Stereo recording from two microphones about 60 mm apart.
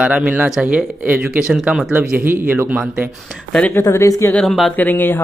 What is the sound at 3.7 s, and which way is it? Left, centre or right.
Speech, left.